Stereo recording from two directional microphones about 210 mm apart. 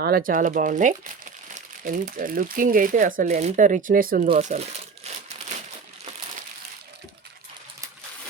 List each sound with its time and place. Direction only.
0.0 s speech: 45° right (ahead or behind)
4.3 s crumpling: 30° right (ahead or behind)